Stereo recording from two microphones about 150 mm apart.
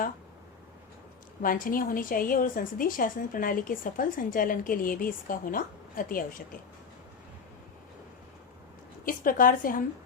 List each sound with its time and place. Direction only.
1.4 s a woman's voice: 70° left (ahead or behind)
9.0 s a woman's voice: 65° left (ahead or behind)